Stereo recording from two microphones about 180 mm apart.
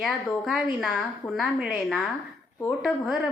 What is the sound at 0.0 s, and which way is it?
A woman's voice, centre (ahead or behind).